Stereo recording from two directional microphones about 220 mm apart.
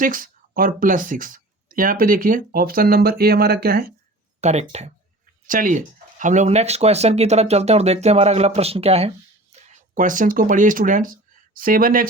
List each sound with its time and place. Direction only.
0.0 s speech: 40° right (ahead or behind)
4.4 s speech: 30° right (ahead or behind)